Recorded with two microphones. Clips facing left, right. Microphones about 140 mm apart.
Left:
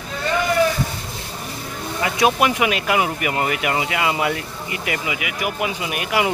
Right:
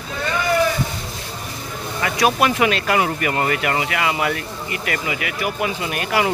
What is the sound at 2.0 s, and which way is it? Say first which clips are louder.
Speech: even; 20° left (ahead or behind).